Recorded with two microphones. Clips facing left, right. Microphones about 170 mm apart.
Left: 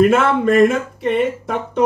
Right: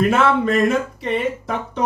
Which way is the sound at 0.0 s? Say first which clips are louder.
Left 3 dB; 50° left (ahead or behind).